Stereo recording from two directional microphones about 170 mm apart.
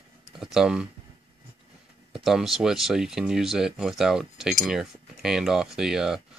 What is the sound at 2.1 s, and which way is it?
Speech, centre (ahead or behind).